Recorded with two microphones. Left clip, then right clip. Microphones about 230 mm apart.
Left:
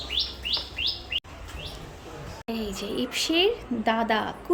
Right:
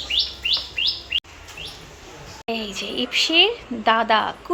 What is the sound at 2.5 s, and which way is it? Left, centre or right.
A woman's voice, centre.